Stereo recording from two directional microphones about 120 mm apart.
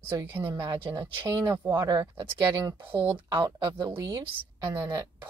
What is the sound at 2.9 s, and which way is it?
Speech, 45° right (ahead or behind).